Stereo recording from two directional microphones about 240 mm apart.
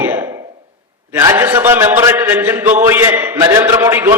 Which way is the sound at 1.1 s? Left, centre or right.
Centre.